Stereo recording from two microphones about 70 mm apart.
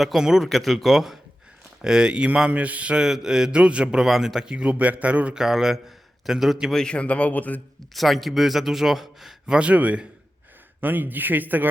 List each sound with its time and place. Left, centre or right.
0.0 s speech: centre
5.4 s speech: centre
6.7 s speech: centre
7.9 s speech: centre
9.6 s speech: centre